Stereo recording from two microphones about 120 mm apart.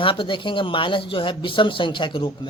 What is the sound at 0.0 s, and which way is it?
Speech, 45° left (ahead or behind).